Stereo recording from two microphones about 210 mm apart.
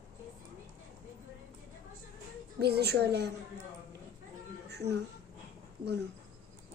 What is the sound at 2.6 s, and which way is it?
Speech, 50° right (ahead or behind).